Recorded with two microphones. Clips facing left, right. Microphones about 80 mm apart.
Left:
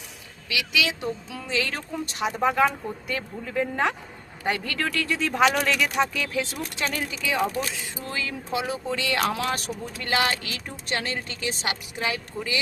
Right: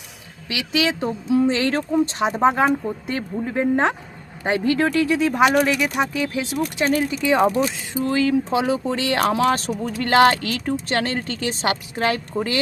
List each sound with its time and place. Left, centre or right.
0.4 s speech: right
1.9 s speech: right
7.1 s speech: right
9.8 s a woman's voice: right